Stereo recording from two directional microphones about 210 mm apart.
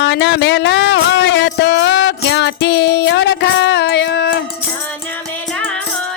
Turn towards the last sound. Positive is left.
turn(degrees=50)  # may be behind; listen again after turning